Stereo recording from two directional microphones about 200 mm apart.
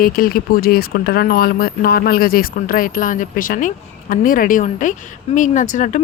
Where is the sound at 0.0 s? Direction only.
45° left (ahead or behind).